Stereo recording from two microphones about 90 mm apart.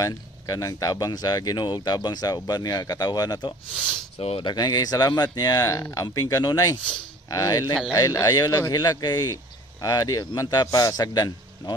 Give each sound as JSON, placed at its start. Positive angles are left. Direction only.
{"t": 0.0, "sound": "speech", "side_deg": 40}
{"t": 3.7, "sound": "speech", "side_deg": 5}
{"t": 4.2, "sound": "speech", "side_deg": 75}